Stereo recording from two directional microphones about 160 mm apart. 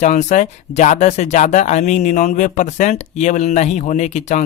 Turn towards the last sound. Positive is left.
turn(degrees=45)  # may be behind; listen again after turning